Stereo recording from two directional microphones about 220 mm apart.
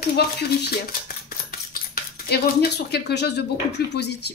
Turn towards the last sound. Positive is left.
turn(degrees=50)  # may be behind; listen again after turning